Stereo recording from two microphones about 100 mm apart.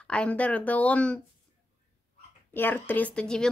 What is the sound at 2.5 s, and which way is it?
Speech, 20° left (ahead or behind).